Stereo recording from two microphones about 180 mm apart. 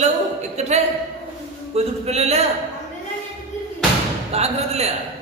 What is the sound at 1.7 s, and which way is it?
Speech, 35° right (ahead or behind).